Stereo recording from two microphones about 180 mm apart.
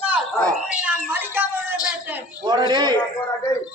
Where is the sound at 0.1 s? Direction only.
5° left (ahead or behind).